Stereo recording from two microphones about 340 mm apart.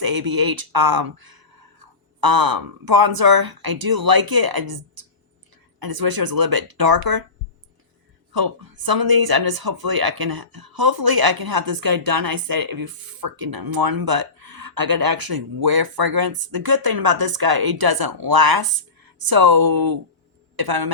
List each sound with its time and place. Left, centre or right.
0.0 s speech: right
8.3 s speech: right